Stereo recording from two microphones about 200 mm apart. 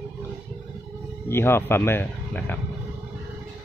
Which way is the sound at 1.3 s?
10° left (ahead or behind).